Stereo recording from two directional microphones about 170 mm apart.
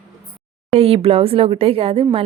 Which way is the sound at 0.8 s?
35° right (ahead or behind).